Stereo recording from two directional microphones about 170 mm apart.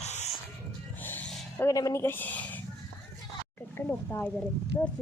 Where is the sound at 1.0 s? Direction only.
10° left (ahead or behind).